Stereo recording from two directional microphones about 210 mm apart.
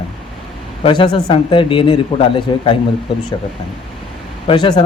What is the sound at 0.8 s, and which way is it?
Speech, 20° left (ahead or behind).